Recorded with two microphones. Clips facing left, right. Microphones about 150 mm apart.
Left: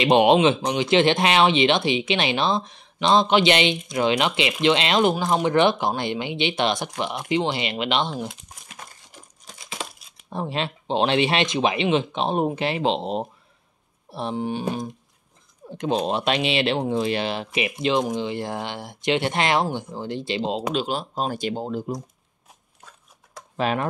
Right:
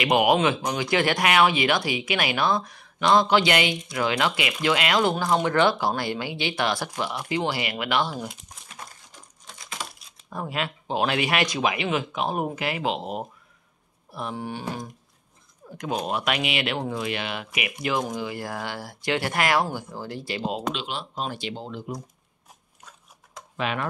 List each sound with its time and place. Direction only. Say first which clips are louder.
0.0 s speech: left 4 dB; 25° left (ahead or behind)
10.3 s speech: left 3 dB; 25° left (ahead or behind)
20.7 s speech: left 7 dB; 40° left (ahead or behind)
23.5 s speech: left 4 dB; 35° left (ahead or behind)